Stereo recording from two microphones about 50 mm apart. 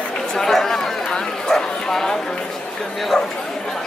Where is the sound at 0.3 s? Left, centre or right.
Centre.